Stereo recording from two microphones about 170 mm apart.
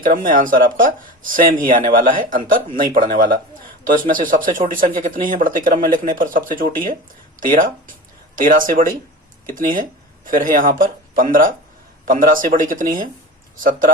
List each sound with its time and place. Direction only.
0.0 s speech: 55° right (ahead or behind)